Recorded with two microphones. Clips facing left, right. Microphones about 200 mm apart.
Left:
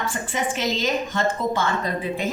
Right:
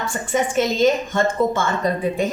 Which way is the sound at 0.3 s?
50° right (ahead or behind).